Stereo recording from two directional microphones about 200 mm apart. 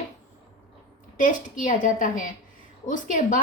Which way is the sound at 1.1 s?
40° left (ahead or behind).